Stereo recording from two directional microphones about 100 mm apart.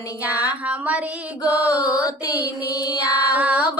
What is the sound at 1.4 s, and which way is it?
Music, 35° left (ahead or behind).